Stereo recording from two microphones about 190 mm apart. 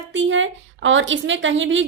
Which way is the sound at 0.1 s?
80° right.